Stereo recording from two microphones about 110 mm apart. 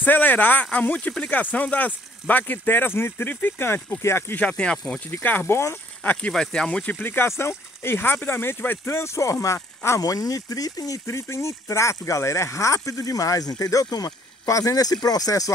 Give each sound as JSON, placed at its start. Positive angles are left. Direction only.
{"t": 0.0, "sound": "speech", "side_deg": 15}
{"t": 6.2, "sound": "speech", "side_deg": 5}